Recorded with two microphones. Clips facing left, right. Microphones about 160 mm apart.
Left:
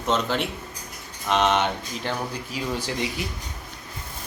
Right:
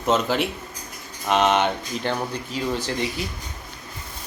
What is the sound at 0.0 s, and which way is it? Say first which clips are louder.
Speech: right 3 dB; 5° right (ahead or behind).